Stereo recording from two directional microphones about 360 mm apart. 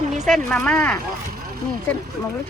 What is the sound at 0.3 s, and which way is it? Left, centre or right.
Speech, centre.